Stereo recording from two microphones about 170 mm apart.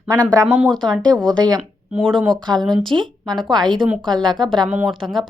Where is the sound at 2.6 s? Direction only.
25° right (ahead or behind).